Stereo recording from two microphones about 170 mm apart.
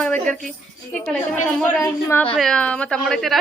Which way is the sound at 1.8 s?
15° left (ahead or behind).